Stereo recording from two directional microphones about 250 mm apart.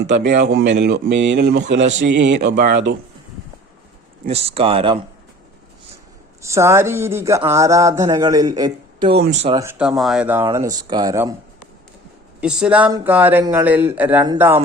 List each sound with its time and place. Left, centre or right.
0.1 s speech: right
4.3 s speech: right
6.4 s speech: centre
9.6 s speech: centre
10.7 s speech: centre
12.4 s speech: centre